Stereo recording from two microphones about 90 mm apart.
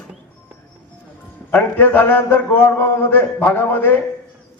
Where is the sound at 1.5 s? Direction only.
20° left (ahead or behind).